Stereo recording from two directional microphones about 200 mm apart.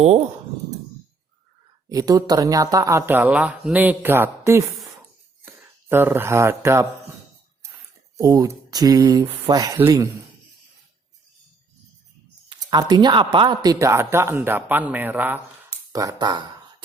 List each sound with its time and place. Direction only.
1.9 s speech: 20° right (ahead or behind)
8.1 s speech: 15° right (ahead or behind)
12.5 s speech: 20° right (ahead or behind)